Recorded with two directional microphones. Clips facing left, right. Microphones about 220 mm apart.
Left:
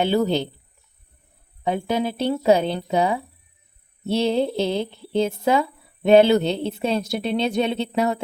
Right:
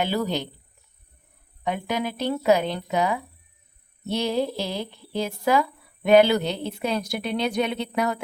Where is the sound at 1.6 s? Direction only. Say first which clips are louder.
Left 4 dB; 30° left (ahead or behind).